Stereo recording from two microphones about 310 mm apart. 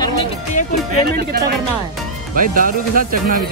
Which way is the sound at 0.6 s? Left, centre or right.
Left.